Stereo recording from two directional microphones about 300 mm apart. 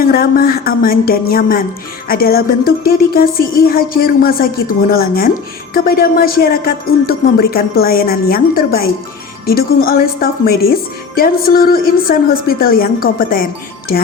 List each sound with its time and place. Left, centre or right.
0.0 s a woman's voice: left